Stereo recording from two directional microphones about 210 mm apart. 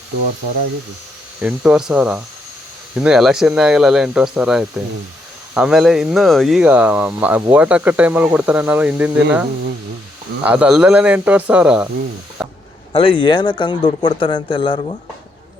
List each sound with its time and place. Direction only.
1.4 s speech: 5° right (ahead or behind)
12.4 s a sound: 5° right (ahead or behind)
12.9 s speech: 25° left (ahead or behind)